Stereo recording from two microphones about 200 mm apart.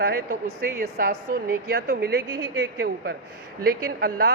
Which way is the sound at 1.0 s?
45° right (ahead or behind).